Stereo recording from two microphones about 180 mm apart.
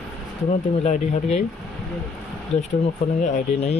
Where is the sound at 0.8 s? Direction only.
40° left (ahead or behind).